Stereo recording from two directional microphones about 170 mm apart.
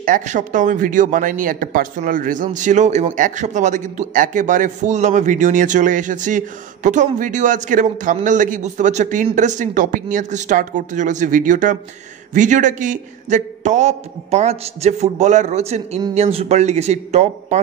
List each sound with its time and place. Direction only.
0.0 s a man's voice: 50° right (ahead or behind)